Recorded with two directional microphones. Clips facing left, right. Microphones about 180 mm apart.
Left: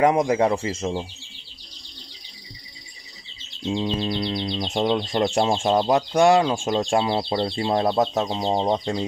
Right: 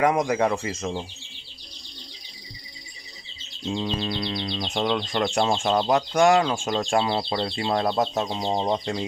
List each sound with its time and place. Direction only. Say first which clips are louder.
0.0 s speech: left 3 dB; 25° left (ahead or behind)
3.6 s speech: left 3 dB; 20° left (ahead or behind)
5.2 s speech: left 2 dB; 35° left (ahead or behind)
5.6 s speech: left 2 dB; 20° left (ahead or behind)
6.6 s speech: left 2 dB; 20° left (ahead or behind)